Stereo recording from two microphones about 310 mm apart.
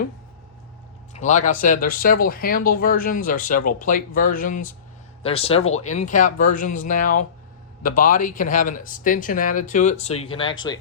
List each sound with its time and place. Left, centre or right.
1.1 s speech: left